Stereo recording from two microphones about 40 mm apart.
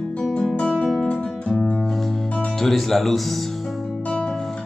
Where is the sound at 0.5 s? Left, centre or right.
Left.